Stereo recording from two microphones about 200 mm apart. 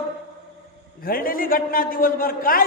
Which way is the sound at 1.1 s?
45° left (ahead or behind).